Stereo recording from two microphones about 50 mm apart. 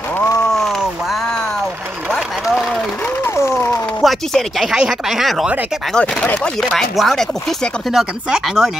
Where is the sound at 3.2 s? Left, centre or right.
Left.